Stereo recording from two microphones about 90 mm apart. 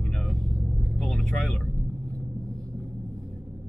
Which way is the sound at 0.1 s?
10° left (ahead or behind).